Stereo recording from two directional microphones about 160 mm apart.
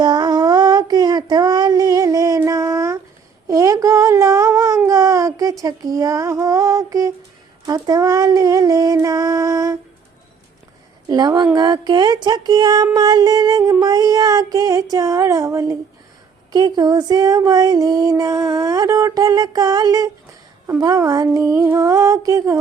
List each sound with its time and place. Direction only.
0.0 s child singing: 25° right (ahead or behind)
3.5 s a sound: 20° right (ahead or behind)
7.6 s music: 25° right (ahead or behind)
11.1 s music: 25° right (ahead or behind)